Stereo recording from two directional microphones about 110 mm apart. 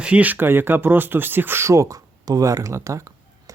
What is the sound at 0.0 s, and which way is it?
Speech, 10° right (ahead or behind).